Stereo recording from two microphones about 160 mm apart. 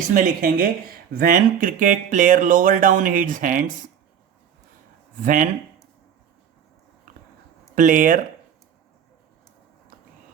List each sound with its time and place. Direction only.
0.1 s speech: 60° right (ahead or behind)
5.2 s speech: 55° right (ahead or behind)
7.8 s speech: 55° right (ahead or behind)